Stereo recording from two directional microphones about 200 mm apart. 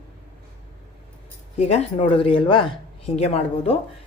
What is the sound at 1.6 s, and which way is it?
Speech, 30° left (ahead or behind).